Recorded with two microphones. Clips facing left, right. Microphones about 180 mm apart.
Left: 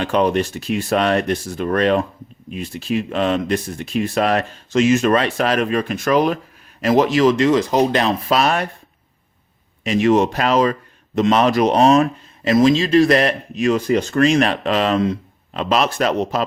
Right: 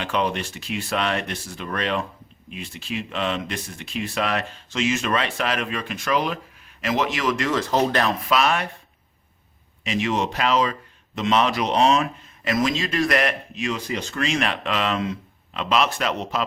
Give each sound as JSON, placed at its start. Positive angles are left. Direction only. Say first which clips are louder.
{"t": 0.0, "sound": "speech", "louder": "left 7 dB", "side_deg": 45}
{"t": 8.3, "sound": "speech", "louder": "left 3 dB", "side_deg": 40}
{"t": 9.8, "sound": "speech", "louder": "left 9 dB", "side_deg": 45}
{"t": 12.5, "sound": "speech", "louder": "left 9 dB", "side_deg": 30}
{"t": 13.6, "sound": "speech", "louder": "left 12 dB", "side_deg": 50}